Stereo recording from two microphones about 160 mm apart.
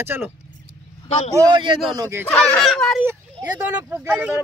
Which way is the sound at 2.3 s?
10° left (ahead or behind).